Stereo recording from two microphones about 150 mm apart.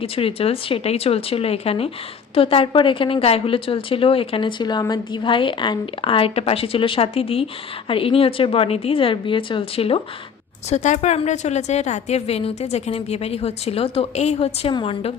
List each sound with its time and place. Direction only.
0.0 s speech: 40° left (ahead or behind)
10.7 s a woman's voice: 55° left (ahead or behind); by 15.1 s 35° left (ahead or behind)